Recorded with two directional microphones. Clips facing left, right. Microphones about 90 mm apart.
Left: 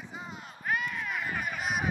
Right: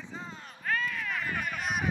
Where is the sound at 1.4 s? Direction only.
5° left (ahead or behind).